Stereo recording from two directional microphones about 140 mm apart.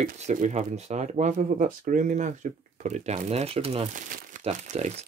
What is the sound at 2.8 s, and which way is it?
Speech, 55° right (ahead or behind).